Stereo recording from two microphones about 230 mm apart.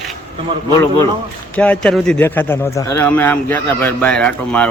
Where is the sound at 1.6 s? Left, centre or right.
Centre.